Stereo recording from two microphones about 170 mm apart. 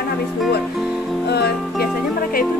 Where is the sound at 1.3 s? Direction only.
75° left (ahead or behind).